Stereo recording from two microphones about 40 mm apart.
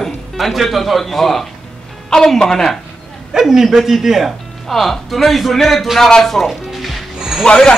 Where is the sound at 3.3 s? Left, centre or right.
Centre.